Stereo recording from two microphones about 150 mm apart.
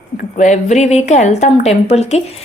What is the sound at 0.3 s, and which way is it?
A woman's voice, 55° left (ahead or behind).